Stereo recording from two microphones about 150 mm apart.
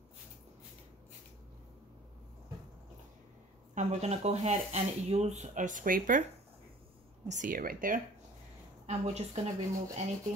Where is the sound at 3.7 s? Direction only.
50° right (ahead or behind); by 6.2 s 65° right (ahead or behind).